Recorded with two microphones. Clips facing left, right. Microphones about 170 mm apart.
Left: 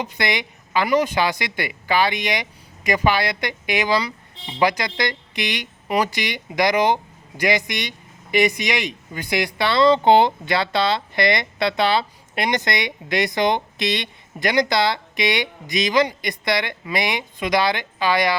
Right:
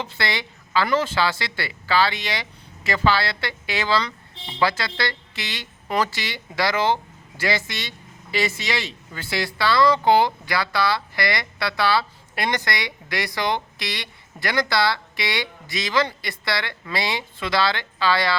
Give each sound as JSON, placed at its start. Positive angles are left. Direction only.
{"t": 0.0, "sound": "a woman's voice", "side_deg": 15}